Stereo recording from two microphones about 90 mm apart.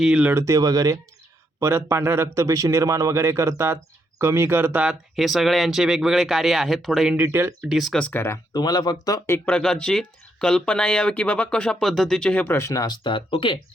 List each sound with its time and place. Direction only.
0.0 s speech: 10° right (ahead or behind)
0.4 s a man's voice: 40° right (ahead or behind)
1.5 s a man's voice: 30° right (ahead or behind)
4.8 s speech: 5° right (ahead or behind)
7.2 s speech: 25° right (ahead or behind)
7.7 s speech: centre (ahead or behind)
7.9 s speech: 15° left (ahead or behind)
8.5 s speech: 50° left (ahead or behind)
9.5 s speech: 10° left (ahead or behind)
12.5 s speech: 30° left (ahead or behind)
13.0 s speech: 70° left (ahead or behind)